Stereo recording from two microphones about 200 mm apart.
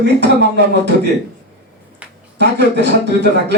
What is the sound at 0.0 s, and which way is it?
Speech, 60° right (ahead or behind).